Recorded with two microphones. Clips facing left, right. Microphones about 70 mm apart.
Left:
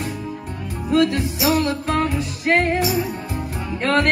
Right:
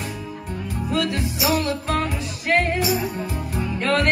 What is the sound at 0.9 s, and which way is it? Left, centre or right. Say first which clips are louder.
Music: left 6 dB; left.